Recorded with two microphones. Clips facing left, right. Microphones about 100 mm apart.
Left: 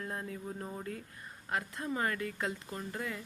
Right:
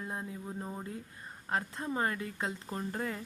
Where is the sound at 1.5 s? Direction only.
30° right (ahead or behind).